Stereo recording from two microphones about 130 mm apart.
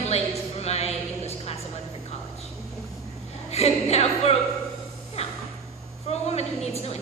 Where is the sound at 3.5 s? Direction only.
55° left (ahead or behind).